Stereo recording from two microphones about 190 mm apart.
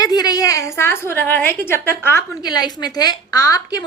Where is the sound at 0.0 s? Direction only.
20° left (ahead or behind).